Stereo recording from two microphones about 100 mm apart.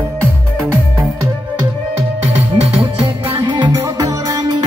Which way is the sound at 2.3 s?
85° right.